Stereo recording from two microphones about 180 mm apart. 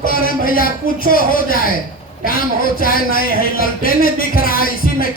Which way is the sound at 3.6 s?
55° left (ahead or behind).